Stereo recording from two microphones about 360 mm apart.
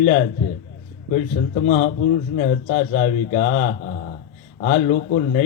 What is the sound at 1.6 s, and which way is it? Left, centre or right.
Speech, left.